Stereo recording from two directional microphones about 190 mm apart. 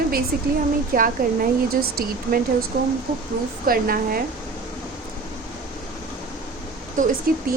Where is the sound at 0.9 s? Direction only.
45° right (ahead or behind).